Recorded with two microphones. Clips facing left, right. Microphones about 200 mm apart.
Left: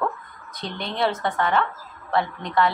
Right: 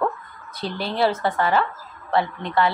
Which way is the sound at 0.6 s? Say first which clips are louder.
Right 4 dB; 30° right (ahead or behind).